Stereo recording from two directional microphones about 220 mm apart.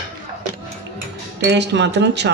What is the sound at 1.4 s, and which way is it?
Speech, 50° right (ahead or behind).